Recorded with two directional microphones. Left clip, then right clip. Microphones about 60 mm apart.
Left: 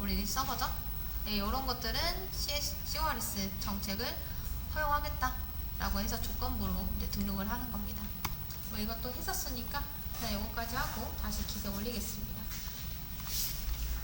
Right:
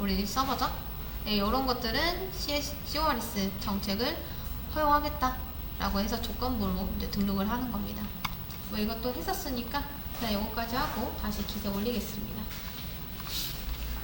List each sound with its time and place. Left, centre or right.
0.0 s a woman's voice: left